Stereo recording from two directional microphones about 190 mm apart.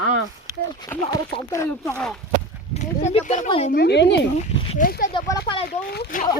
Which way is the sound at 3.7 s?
60° left (ahead or behind).